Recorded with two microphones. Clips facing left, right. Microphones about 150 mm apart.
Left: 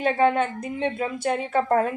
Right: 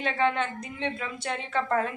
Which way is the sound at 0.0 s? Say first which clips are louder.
Left 6 dB; 45° left (ahead or behind).